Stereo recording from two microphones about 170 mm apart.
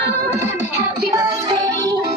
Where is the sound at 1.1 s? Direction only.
25° right (ahead or behind).